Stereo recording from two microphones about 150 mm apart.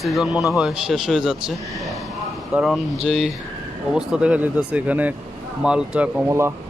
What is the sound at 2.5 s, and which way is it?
A man's voice, centre (ahead or behind).